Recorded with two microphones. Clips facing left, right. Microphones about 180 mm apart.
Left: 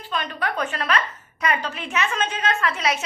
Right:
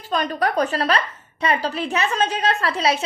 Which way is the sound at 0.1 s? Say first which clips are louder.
Right 6 dB; 40° right (ahead or behind).